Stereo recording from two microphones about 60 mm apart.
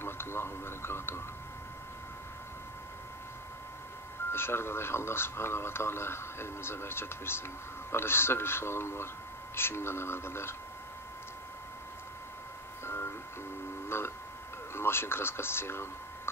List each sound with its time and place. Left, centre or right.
0.0 s a man's voice: left
4.3 s a man's voice: left
12.8 s a sound: left
14.8 s a man's voice: left